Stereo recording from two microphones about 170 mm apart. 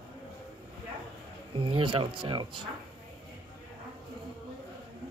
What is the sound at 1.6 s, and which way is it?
Speech, 30° right (ahead or behind).